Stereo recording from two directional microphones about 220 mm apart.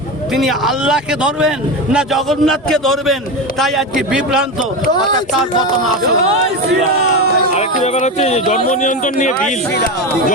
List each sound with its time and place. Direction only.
0.3 s speech: centre (ahead or behind)
7.5 s speech: 30° left (ahead or behind)